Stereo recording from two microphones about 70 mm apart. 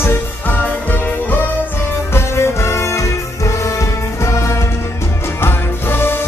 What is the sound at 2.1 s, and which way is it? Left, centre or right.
Music, left.